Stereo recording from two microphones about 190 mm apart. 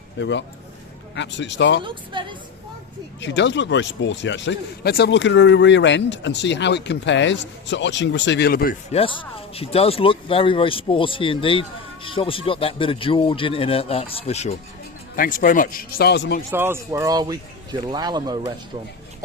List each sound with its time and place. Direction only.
0.2 s speech: 70° left (ahead or behind)
1.8 s speech: 25° right (ahead or behind)
3.2 s speech: 70° left (ahead or behind)
8.9 s speech: 30° left (ahead or behind)
15.1 s speech: 45° left (ahead or behind); by 16.4 s 60° left (ahead or behind)
16.5 s speech: 15° right (ahead or behind)